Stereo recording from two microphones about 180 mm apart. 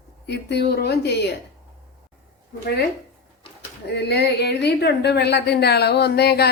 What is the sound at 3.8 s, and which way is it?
Speech, 65° left (ahead or behind).